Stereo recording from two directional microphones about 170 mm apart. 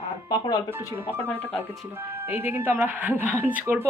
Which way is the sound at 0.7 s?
15° right (ahead or behind).